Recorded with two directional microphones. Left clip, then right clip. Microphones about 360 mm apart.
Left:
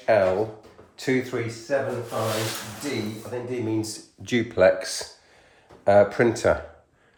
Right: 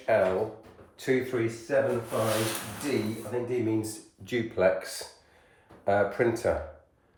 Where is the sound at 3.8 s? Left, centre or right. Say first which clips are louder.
Left 4 dB; left.